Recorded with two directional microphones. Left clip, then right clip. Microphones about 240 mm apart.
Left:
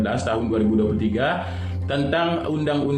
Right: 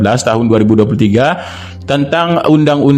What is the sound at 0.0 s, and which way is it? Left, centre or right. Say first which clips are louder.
A man's voice: right 12 dB; right.